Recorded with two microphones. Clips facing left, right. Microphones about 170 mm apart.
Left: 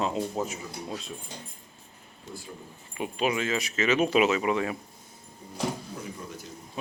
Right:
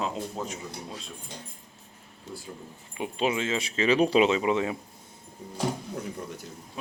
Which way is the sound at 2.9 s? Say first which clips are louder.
Even; 25° right (ahead or behind).